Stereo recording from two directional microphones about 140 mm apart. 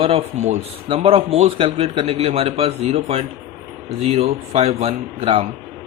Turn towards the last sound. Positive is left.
turn(degrees=-40)  # may be behind; listen again after turning